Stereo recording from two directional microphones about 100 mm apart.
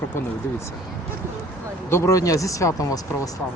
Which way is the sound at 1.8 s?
25° left (ahead or behind).